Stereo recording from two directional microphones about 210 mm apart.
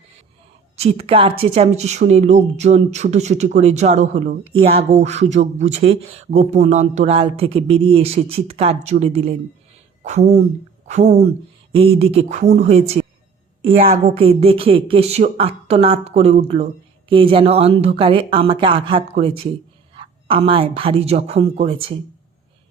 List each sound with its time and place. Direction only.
0.8 s a woman's voice: 25° right (ahead or behind)
13.7 s speech: 40° right (ahead or behind)
14.2 s speech: 25° right (ahead or behind)